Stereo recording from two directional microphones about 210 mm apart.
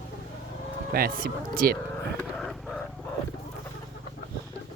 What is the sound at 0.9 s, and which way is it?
Speech, 45° right (ahead or behind).